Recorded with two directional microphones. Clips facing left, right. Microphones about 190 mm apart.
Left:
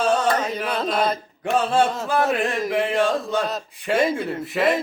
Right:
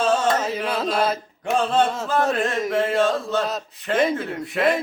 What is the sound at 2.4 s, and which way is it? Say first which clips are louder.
Chant: even; centre (ahead or behind).